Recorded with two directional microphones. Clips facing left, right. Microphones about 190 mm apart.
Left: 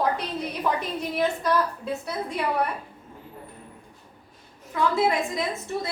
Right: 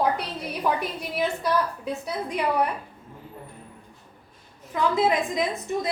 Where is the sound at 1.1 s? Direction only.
15° right (ahead or behind).